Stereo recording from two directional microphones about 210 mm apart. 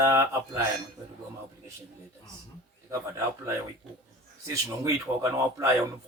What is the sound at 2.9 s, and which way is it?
Speech, 15° right (ahead or behind).